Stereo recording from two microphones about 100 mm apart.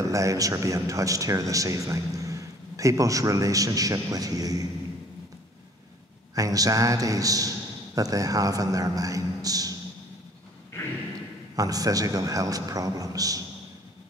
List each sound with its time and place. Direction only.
0.0 s a man's voice: 30° right (ahead or behind)
6.3 s a man's voice: 35° right (ahead or behind)
11.5 s a man's voice: 35° right (ahead or behind)